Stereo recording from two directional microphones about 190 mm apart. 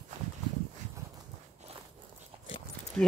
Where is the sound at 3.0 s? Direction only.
5° left (ahead or behind).